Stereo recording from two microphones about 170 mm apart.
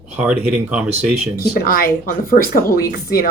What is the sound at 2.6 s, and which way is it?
Speech, 20° left (ahead or behind).